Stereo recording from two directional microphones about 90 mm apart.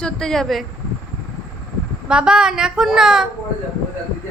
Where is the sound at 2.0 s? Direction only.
10° right (ahead or behind).